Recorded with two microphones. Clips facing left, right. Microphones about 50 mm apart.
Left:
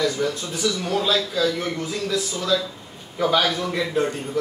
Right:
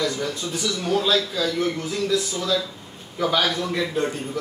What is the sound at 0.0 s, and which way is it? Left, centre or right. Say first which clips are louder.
A man's voice: left 2 dB; centre.